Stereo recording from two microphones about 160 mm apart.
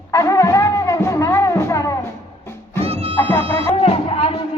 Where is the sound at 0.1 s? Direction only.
20° left (ahead or behind).